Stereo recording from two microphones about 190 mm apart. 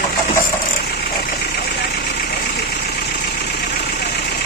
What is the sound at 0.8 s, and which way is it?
Vehicle, 55° left (ahead or behind).